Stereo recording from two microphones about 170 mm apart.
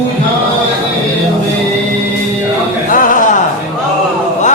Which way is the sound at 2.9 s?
55° left (ahead or behind).